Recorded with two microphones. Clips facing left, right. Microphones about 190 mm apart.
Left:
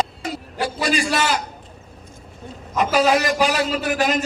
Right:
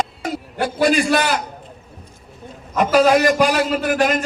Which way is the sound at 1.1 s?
55° right (ahead or behind).